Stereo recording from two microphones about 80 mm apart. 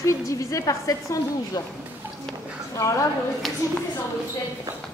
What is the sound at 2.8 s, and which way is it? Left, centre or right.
Speech, left.